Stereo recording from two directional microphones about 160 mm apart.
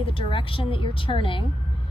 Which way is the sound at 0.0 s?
35° left (ahead or behind).